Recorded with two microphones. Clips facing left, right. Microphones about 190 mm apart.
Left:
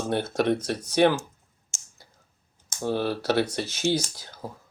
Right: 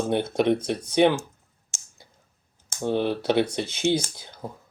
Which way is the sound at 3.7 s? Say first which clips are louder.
Right 2 dB; 55° right (ahead or behind).